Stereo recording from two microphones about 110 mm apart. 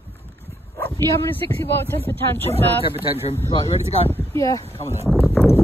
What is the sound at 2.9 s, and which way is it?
Speech, 60° left (ahead or behind).